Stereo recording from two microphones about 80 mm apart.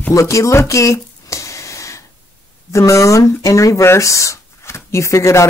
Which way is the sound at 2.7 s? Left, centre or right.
Left.